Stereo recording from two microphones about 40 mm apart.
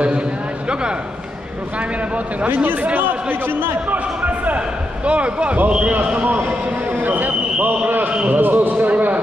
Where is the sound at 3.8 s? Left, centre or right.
Right.